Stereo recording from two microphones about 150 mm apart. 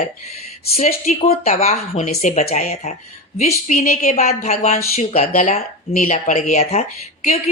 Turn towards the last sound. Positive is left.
turn(degrees=45)  # may be behind; listen again after turning